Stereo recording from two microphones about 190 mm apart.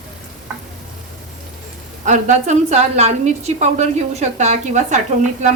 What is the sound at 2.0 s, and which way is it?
A woman's voice, 40° right (ahead or behind).